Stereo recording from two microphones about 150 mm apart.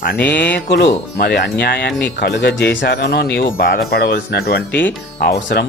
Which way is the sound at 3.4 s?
70° left (ahead or behind).